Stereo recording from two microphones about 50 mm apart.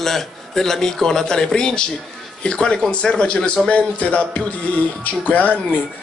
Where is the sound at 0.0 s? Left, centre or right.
Centre.